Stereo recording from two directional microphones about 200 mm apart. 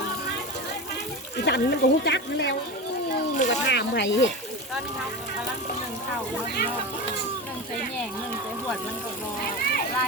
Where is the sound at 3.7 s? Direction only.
60° left (ahead or behind).